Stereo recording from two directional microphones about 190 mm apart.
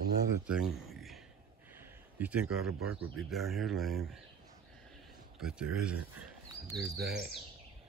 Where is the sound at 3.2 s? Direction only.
Centre (ahead or behind).